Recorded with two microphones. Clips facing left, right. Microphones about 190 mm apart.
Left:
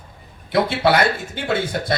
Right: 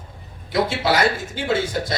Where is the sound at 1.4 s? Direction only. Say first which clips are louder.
Right 1 dB; 60° left (ahead or behind).